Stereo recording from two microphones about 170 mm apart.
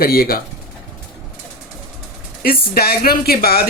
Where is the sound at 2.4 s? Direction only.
65° left (ahead or behind).